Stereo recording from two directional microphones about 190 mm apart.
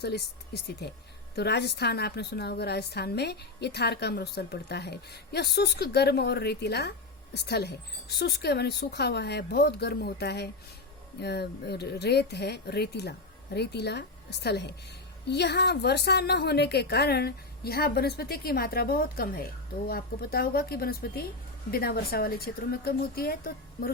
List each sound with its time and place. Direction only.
0.0 s a woman's voice: 55° left (ahead or behind)